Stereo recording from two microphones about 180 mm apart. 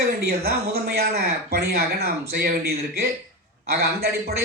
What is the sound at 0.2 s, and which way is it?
A man's voice, 60° right (ahead or behind).